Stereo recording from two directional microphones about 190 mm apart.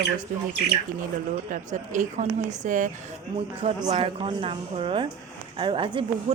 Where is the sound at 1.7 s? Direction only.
40° right (ahead or behind).